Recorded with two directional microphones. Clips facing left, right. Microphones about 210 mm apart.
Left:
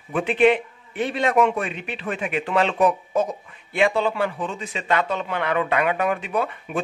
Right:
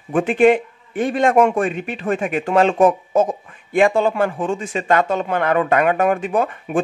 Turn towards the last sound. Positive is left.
turn(degrees=-45)  # may be behind; listen again after turning